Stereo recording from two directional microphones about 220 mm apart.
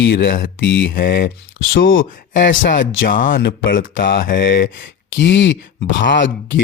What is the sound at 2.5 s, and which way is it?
Speech, 40° left (ahead or behind).